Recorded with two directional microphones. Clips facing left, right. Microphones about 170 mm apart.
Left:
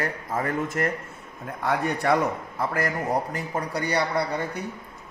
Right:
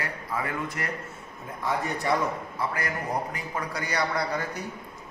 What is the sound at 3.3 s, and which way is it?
A man's voice, 35° left (ahead or behind).